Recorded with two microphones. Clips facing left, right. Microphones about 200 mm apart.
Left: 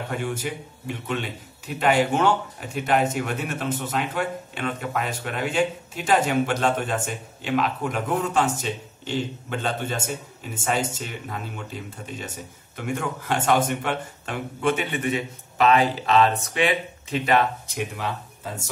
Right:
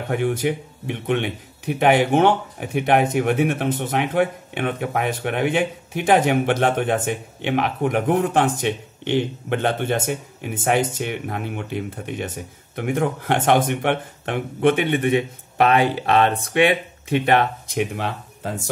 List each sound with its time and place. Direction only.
0.1 s speech: 55° right (ahead or behind)